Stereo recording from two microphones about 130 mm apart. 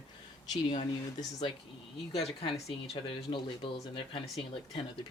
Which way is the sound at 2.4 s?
50° left (ahead or behind).